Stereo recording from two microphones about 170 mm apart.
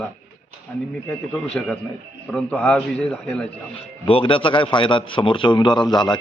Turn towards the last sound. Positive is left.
turn(degrees=25)  # may be behind; listen again after turning